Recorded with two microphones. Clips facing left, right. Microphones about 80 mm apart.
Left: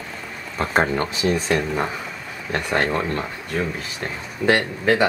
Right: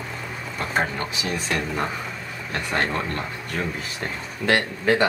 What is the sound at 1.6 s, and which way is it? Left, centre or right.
Speech, centre.